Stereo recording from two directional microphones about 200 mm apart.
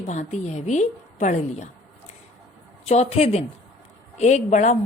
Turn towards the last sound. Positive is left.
turn(degrees=35)  # may be behind; listen again after turning